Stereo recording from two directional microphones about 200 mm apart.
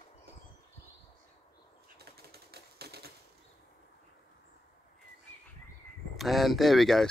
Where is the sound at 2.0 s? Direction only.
50° right (ahead or behind).